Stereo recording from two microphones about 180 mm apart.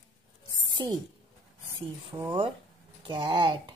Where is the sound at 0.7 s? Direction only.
25° right (ahead or behind).